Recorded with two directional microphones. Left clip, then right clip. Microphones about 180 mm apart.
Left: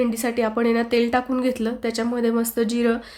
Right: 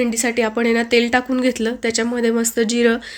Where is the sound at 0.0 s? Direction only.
5° right (ahead or behind).